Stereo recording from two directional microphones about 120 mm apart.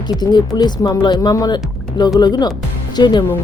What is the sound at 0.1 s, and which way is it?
Speech, 35° left (ahead or behind).